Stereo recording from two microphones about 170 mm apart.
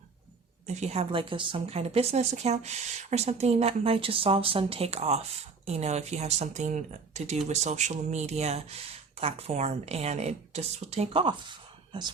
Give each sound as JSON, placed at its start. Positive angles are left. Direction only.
{"t": 0.7, "sound": "a woman's voice", "side_deg": -40}